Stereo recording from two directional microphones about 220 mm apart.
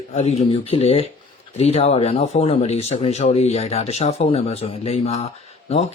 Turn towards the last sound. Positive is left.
turn(degrees=30)  # may be behind; listen again after turning